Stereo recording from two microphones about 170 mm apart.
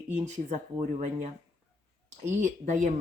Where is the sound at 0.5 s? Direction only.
45° right (ahead or behind).